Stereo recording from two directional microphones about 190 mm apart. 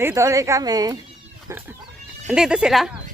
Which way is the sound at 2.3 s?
5° right (ahead or behind).